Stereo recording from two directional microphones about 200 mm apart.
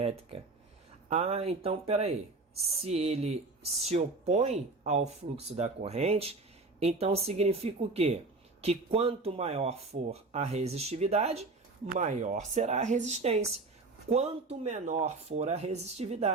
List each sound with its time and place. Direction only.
0.0 s speech: 30° right (ahead or behind)